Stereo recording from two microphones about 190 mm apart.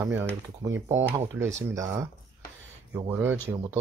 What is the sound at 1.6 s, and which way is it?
Speech, 15° right (ahead or behind).